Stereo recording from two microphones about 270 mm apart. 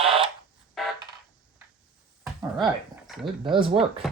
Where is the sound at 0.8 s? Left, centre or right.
Centre.